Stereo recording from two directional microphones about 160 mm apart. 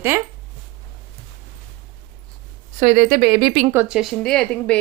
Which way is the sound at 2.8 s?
65° right (ahead or behind).